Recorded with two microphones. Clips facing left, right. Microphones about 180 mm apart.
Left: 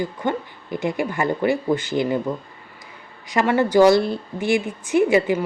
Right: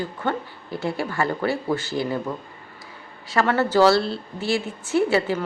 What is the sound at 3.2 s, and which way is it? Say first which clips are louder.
A woman's voice: left 2 dB; 15° left (ahead or behind).